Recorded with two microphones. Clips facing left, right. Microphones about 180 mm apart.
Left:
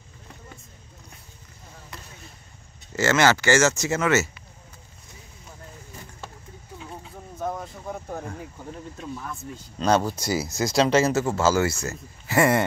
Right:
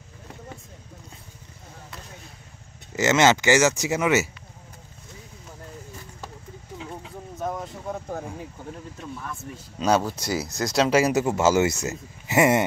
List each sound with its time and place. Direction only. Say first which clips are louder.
3.0 s speech: right 1 dB; 20° right (ahead or behind)
8.1 s speech: right 1 dB; 5° right (ahead or behind)
9.0 s speech: left 1 dB; 10° left (ahead or behind)
9.8 s speech: even; 5° right (ahead or behind)
10.9 s speech: even; 10° right (ahead or behind)